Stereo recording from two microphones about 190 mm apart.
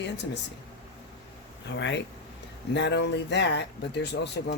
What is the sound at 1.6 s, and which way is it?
Speech, 70° left (ahead or behind).